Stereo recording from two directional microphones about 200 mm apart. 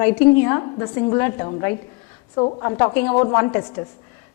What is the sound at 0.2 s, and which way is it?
A woman's voice, 15° left (ahead or behind).